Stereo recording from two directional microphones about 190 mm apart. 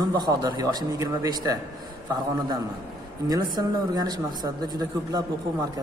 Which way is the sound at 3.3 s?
20° right (ahead or behind).